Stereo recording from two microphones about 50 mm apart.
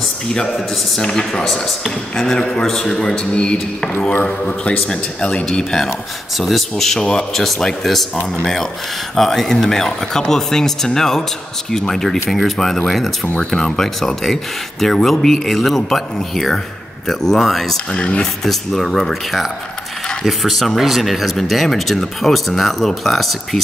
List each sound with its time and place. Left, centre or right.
0.9 s speech: centre
4.1 s a man's voice: left; by 5.9 s centre
5.9 s speech: centre
9.1 s speech: centre
17.9 s a man's voice: left
18.2 s speech: centre